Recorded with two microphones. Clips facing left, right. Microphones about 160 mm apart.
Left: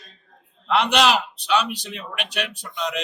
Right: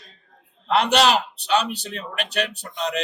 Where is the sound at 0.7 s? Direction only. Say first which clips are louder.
Right 1 dB; 35° right (ahead or behind).